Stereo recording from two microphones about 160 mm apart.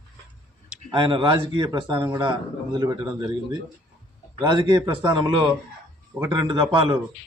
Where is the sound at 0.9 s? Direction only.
30° right (ahead or behind).